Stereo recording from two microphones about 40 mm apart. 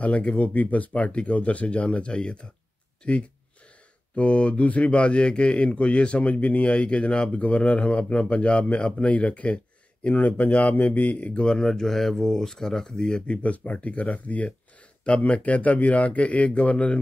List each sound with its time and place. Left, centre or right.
0.0 s speech: left
11.3 s speech: centre
13.3 s speech: left